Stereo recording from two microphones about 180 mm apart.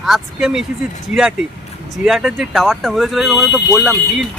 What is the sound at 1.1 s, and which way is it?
Speech, 40° left (ahead or behind).